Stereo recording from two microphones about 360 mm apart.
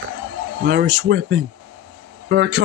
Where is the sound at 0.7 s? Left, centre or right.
Right.